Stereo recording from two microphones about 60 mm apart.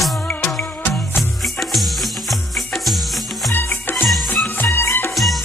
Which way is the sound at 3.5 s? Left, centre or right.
Left.